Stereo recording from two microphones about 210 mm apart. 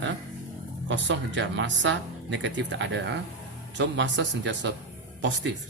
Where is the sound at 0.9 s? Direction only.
60° right (ahead or behind).